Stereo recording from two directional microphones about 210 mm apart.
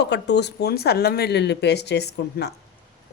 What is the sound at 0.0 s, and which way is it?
A woman's voice, 55° left (ahead or behind).